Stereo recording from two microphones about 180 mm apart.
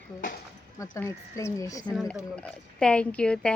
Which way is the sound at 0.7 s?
15° left (ahead or behind).